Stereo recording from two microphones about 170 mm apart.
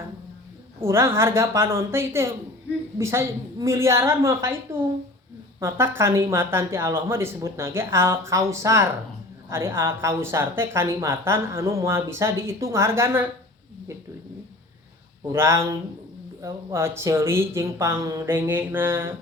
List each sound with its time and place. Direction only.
0.8 s speech: 15° right (ahead or behind)
15.3 s speech: 15° right (ahead or behind)